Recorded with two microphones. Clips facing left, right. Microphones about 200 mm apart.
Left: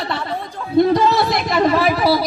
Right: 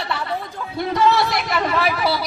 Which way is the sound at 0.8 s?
35° left (ahead or behind).